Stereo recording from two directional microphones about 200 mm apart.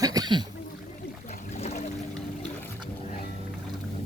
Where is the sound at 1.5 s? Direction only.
35° left (ahead or behind).